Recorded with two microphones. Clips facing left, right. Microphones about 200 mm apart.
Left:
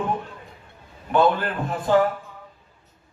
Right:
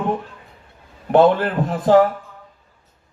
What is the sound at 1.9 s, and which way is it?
Speech, 75° right (ahead or behind).